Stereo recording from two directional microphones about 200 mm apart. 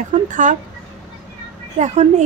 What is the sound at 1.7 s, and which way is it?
Speech, 35° right (ahead or behind).